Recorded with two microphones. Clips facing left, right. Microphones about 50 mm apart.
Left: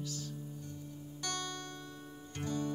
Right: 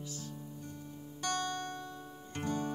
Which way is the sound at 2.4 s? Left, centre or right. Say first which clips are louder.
Right 1 dB; right.